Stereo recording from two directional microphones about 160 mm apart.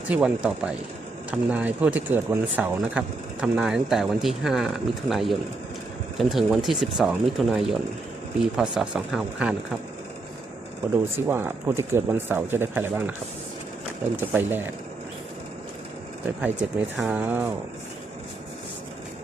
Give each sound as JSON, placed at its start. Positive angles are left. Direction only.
{"t": 0.1, "sound": "speech", "side_deg": -5}
{"t": 11.3, "sound": "speech", "side_deg": -15}
{"t": 14.2, "sound": "speech", "side_deg": -10}
{"t": 16.4, "sound": "speech", "side_deg": -10}